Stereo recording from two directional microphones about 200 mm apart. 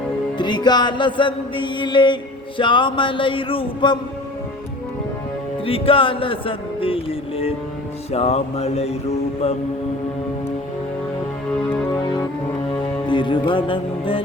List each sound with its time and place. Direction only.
0.3 s music: 20° left (ahead or behind)
5.6 s music: 25° left (ahead or behind)
12.0 s music: 20° left (ahead or behind)